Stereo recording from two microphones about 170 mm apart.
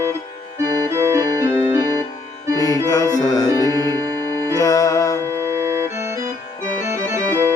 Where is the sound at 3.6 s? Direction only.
20° right (ahead or behind).